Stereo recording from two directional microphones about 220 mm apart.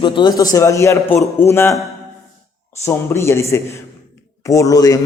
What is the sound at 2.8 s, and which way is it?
A man's voice, 10° left (ahead or behind).